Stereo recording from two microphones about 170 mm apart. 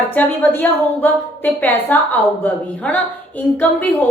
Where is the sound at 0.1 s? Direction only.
10° left (ahead or behind).